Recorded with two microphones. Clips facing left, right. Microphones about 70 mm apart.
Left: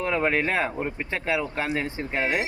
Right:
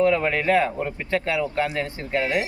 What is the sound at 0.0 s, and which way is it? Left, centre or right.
Speech, centre.